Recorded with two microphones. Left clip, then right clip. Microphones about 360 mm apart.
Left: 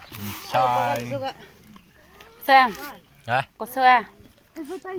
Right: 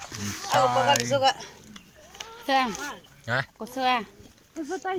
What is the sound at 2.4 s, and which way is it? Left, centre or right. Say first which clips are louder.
Speech: left 8 dB; left.